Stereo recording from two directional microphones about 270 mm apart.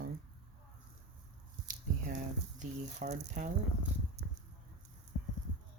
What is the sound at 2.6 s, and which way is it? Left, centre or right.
Speech, right.